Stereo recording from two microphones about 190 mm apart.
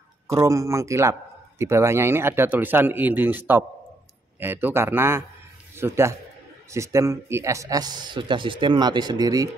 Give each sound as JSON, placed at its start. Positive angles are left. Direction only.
{"t": 0.3, "sound": "speech", "side_deg": -15}